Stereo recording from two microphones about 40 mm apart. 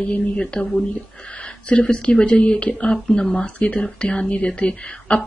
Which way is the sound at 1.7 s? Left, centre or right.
Left.